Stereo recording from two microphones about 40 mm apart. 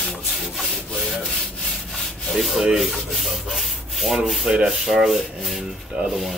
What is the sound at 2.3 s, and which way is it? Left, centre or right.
Rub, centre.